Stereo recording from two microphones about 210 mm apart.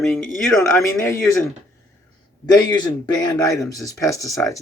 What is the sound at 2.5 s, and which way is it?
Speech, 20° left (ahead or behind).